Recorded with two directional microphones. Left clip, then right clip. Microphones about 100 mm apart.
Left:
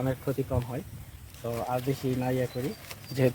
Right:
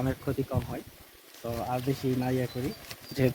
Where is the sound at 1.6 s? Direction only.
20° left (ahead or behind).